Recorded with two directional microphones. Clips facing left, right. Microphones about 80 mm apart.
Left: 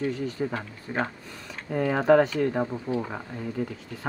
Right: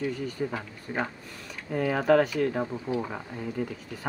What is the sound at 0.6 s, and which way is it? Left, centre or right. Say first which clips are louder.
Speech: left 2 dB; left.